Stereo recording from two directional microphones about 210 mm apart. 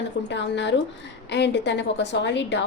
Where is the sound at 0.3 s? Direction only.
55° left (ahead or behind).